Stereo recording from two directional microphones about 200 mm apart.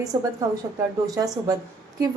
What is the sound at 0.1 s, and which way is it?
A woman's voice, 20° right (ahead or behind).